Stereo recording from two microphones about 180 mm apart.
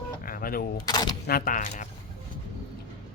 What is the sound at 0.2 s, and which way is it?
Power windows, 50° left (ahead or behind).